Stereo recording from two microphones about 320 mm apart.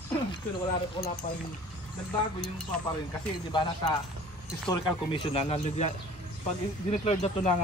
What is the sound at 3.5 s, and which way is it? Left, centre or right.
Speech, centre.